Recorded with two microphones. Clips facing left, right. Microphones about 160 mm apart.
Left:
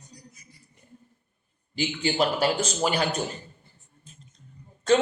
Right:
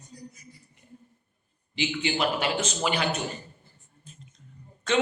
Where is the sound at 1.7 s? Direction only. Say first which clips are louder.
Left 2 dB; 40° left (ahead or behind).